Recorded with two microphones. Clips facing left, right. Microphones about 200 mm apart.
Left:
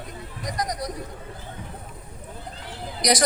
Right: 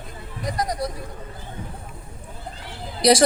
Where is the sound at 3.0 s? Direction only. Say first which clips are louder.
Right 6 dB; 30° right (ahead or behind).